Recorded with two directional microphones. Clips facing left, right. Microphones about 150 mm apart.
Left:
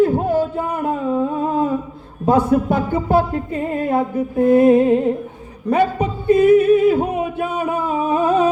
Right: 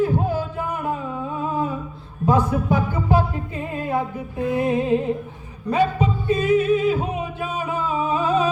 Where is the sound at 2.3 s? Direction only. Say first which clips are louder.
Left 5 dB; 60° left (ahead or behind).